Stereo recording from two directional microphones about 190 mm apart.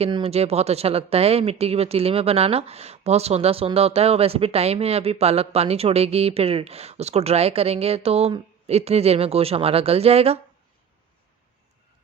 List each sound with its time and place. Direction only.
0.0 s speech: 30° right (ahead or behind)